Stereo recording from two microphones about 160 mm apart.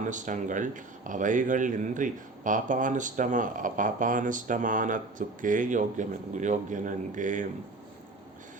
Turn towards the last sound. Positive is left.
turn(degrees=-55)  # may be behind; listen again after turning